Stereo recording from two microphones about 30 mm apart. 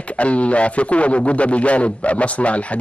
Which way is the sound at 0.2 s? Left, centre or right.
Left.